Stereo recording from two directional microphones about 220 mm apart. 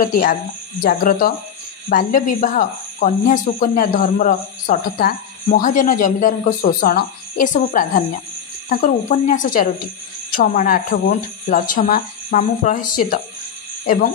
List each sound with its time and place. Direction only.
0.0 s speech: 40° left (ahead or behind)